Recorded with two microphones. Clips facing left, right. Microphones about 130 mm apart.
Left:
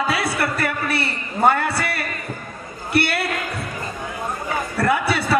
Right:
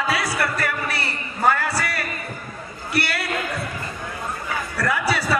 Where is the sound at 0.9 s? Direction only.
25° left (ahead or behind).